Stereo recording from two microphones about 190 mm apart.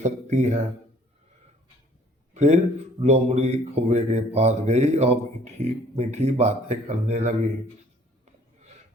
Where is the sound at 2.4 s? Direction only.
35° right (ahead or behind).